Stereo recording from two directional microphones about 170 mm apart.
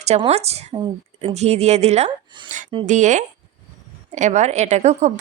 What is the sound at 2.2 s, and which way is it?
Speech, 25° right (ahead or behind).